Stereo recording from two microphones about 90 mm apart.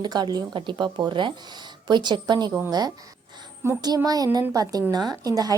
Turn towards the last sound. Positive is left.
turn(degrees=-45)  # may be behind; listen again after turning